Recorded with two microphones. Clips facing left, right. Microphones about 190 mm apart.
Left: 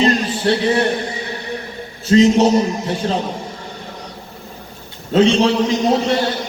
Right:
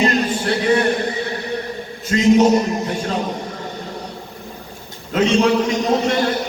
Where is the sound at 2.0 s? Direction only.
30° left (ahead or behind).